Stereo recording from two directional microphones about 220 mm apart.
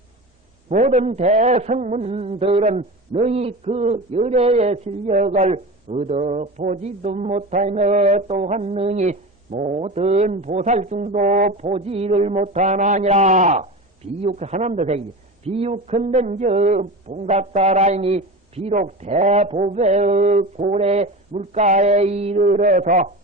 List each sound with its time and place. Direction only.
0.7 s a man's voice: 35° right (ahead or behind)